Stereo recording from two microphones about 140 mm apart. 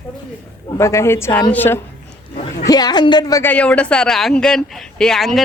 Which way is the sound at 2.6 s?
30° left (ahead or behind).